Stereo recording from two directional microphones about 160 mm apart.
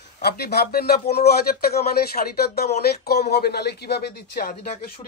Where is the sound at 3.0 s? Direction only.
90° left; by 5.1 s 60° left (ahead or behind).